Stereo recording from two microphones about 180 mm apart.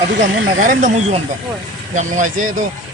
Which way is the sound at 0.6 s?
45° right (ahead or behind).